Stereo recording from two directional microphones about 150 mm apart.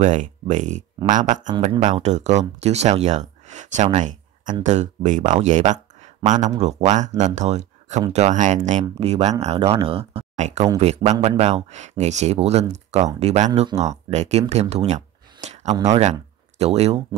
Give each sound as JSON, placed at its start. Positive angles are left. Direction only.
{"t": 0.0, "sound": "speech", "side_deg": -55}
{"t": 15.4, "sound": "a sound", "side_deg": -50}
{"t": 15.8, "sound": "speech", "side_deg": -50}